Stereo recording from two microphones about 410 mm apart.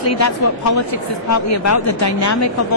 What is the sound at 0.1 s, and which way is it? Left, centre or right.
A woman's voice, left.